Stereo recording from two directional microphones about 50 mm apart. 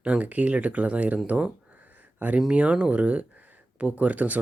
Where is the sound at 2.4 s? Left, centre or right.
Right.